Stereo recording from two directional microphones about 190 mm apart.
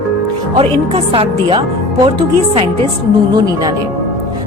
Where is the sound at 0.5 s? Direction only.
30° right (ahead or behind).